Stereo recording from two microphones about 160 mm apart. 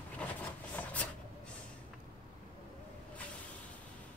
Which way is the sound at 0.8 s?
10° left (ahead or behind).